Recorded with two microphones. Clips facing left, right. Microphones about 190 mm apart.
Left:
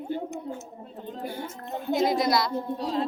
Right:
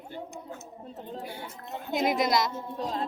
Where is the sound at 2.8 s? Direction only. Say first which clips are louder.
Left 2 dB; 45° right (ahead or behind).